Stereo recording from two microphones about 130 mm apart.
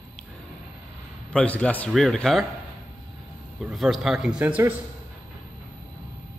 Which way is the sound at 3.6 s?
Centre (ahead or behind).